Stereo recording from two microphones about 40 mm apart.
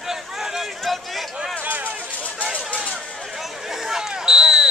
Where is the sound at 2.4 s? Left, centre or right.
Right.